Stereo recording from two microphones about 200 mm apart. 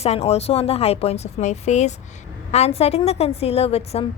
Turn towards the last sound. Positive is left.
turn(degrees=30)  # may be behind; listen again after turning